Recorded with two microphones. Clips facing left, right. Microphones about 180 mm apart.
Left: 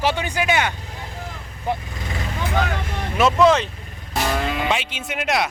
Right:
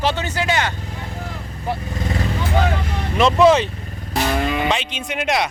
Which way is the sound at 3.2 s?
5° left (ahead or behind).